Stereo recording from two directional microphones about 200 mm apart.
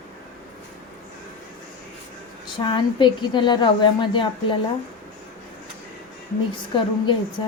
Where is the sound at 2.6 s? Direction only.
25° left (ahead or behind).